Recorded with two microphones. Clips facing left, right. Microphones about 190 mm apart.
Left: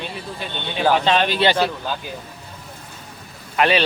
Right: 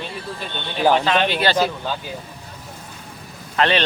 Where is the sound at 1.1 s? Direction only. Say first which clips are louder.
Left 1 dB; 25° left (ahead or behind).